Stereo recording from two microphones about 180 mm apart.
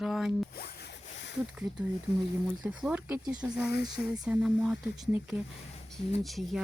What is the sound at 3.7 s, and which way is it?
Speech, 60° left (ahead or behind).